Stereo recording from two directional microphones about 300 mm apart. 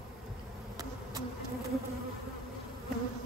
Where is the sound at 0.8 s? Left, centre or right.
Centre.